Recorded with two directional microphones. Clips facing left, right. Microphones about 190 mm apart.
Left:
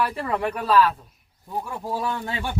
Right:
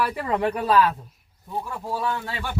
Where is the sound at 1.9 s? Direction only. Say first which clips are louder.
Even; 20° left (ahead or behind).